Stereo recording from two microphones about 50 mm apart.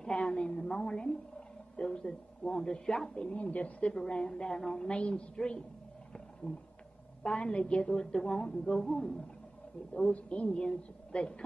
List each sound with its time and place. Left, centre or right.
0.0 s a woman's voice: centre
3.3 s a woman's voice: left
3.9 s a woman's voice: centre
10.1 s a woman's voice: left
10.6 s a woman's voice: centre